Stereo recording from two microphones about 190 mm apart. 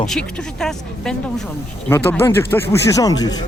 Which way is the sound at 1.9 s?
10° left (ahead or behind).